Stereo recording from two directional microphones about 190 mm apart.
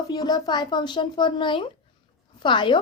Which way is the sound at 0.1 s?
20° left (ahead or behind).